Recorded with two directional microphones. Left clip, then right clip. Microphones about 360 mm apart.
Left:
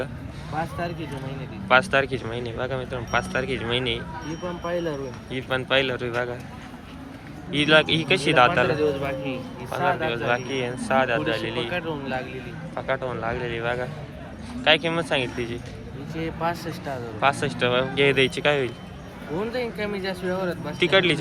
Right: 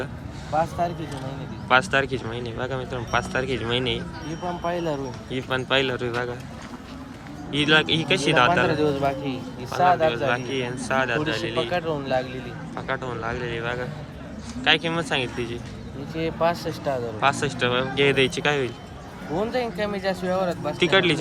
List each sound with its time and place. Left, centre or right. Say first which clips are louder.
0.5 s speech: right 5 dB; centre
7.5 s speech: left 1 dB; centre
8.6 s a man's voice: right 1 dB; right
10.2 s speech: even; centre
11.7 s a man's voice: right 4 dB; right
12.7 s speech: left 2 dB; centre
16.1 s speech: right 4 dB; centre